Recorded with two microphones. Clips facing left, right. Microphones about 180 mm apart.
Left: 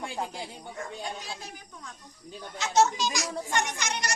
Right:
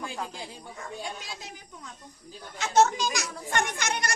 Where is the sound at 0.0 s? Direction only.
25° left (ahead or behind).